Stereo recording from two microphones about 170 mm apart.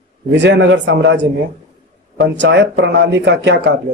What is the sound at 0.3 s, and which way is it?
Speech, 90° right.